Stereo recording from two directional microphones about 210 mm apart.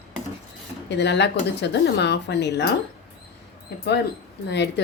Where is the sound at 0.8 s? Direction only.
55° left (ahead or behind).